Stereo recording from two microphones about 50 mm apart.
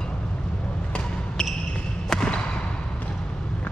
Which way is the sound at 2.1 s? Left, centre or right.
Centre.